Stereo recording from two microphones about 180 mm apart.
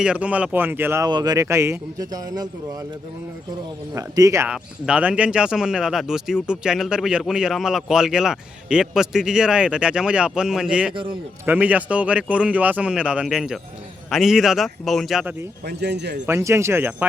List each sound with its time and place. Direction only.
0.0 s speech: 5° right (ahead or behind)
3.9 s speech: 20° right (ahead or behind)
4.4 s speech: 5° right (ahead or behind)
15.6 s speech: 65° right (ahead or behind)
16.2 s speech: 15° right (ahead or behind)